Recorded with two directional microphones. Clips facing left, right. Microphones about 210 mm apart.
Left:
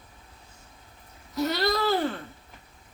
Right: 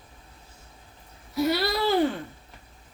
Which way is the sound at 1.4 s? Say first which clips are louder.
Right 1 dB; 10° right (ahead or behind).